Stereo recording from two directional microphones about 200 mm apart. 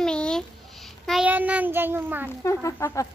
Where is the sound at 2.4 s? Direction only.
15° left (ahead or behind).